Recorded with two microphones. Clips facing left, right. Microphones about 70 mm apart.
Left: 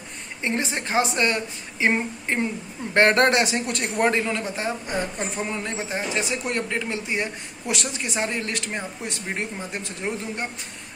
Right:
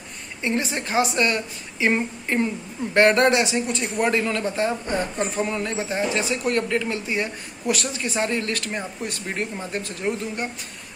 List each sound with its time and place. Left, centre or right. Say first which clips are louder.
0.4 s a man's voice: right 1 dB; left
4.1 s speech: right 2 dB; left